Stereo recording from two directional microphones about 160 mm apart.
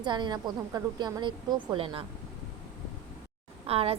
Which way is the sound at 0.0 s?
30° right (ahead or behind).